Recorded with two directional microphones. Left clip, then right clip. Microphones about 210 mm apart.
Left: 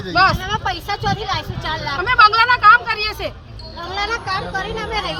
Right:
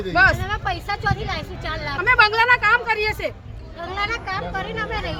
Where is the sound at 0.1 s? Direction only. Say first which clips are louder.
Left 2 dB; 15° right (ahead or behind).